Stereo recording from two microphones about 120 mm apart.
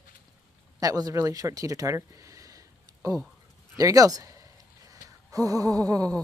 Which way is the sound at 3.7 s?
30° right (ahead or behind).